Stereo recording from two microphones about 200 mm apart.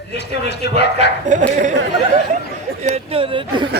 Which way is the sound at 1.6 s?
35° right (ahead or behind).